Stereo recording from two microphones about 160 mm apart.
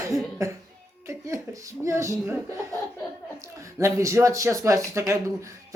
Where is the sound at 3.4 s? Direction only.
20° right (ahead or behind).